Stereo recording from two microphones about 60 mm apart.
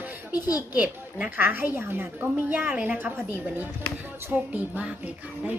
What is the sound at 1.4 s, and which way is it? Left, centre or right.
A woman's voice, right.